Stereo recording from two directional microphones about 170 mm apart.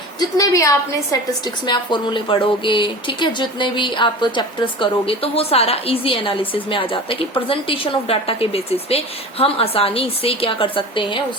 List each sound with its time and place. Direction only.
0.2 s a woman's voice: 20° left (ahead or behind)